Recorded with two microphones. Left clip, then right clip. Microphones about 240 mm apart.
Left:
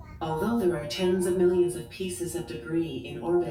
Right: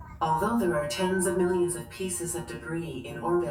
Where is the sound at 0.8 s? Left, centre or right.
Right.